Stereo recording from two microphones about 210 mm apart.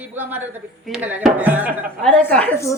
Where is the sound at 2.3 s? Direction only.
5° left (ahead or behind).